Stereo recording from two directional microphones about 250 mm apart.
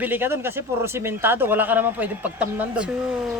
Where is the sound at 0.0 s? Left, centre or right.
Centre.